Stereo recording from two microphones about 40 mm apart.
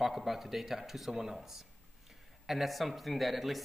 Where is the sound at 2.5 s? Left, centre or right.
Centre.